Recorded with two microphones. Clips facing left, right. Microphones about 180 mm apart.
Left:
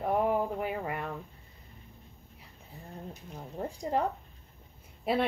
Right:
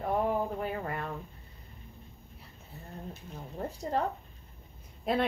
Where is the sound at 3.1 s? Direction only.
15° left (ahead or behind).